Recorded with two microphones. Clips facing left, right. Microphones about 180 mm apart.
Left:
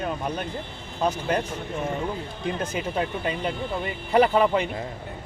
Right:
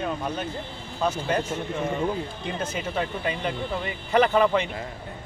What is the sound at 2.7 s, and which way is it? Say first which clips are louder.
Speech: left 1 dB; 5° left (ahead or behind).